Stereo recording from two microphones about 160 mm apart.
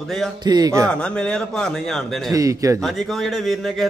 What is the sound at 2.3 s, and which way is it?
Speech, 20° right (ahead or behind).